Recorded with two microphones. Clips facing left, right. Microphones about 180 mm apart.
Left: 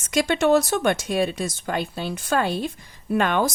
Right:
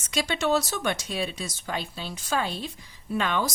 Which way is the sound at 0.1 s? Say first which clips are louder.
Left 7 dB; 50° left (ahead or behind).